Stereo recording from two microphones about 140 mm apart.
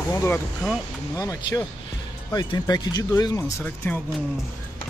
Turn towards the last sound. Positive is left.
turn(degrees=15)  # may be behind; listen again after turning